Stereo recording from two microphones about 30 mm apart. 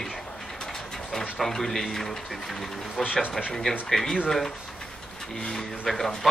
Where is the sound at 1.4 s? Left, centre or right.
Centre.